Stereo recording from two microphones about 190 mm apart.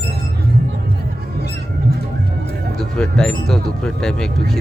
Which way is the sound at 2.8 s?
5° left (ahead or behind).